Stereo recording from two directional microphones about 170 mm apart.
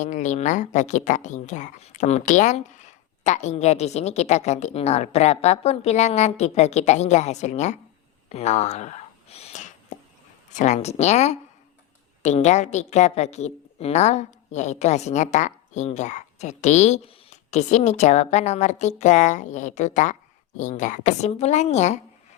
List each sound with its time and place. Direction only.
0.0 s a woman's voice: 45° left (ahead or behind)